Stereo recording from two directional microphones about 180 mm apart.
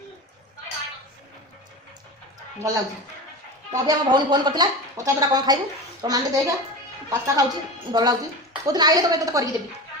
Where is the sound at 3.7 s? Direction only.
20° right (ahead or behind).